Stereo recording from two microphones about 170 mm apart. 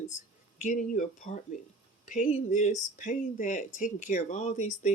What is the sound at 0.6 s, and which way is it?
Speech, 50° left (ahead or behind).